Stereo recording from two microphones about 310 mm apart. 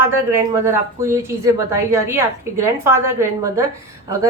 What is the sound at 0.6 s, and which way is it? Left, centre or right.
A woman's voice, centre.